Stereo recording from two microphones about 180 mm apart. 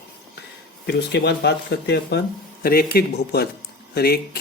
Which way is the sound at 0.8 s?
65° left (ahead or behind).